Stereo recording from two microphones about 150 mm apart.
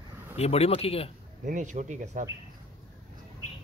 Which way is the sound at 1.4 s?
55° right (ahead or behind).